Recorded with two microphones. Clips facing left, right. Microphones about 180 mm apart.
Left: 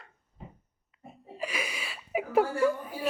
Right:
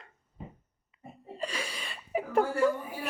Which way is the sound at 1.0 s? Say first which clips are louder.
Even; centre (ahead or behind).